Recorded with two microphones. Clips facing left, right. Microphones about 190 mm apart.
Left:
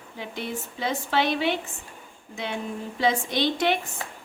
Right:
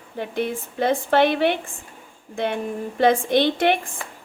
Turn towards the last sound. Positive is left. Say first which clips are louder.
# right 5 dB
turn(degrees=-55)  # may be behind; listen again after turning